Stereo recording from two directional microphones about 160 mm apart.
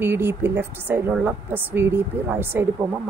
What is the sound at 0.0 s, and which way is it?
A woman's voice, 15° right (ahead or behind).